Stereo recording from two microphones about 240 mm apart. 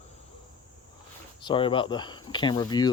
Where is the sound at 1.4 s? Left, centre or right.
Centre.